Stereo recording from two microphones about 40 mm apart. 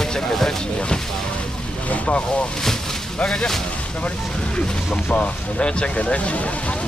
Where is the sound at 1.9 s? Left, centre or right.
Left.